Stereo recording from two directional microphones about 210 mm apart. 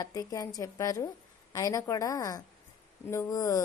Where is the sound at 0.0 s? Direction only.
15° left (ahead or behind).